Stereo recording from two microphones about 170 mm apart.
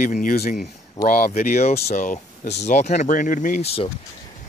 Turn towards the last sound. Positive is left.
turn(degrees=35)  # may be behind; listen again after turning